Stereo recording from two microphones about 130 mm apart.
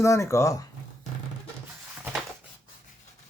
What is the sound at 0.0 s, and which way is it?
Speech, 20° left (ahead or behind).